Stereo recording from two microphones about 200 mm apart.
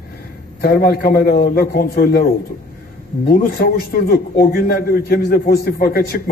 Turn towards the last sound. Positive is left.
turn(degrees=50)  # may be behind; listen again after turning